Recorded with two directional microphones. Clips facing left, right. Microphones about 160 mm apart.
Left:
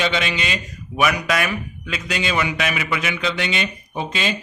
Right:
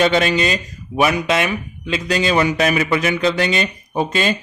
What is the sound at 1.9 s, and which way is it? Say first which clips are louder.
A man's voice: right 6 dB; 40° right (ahead or behind).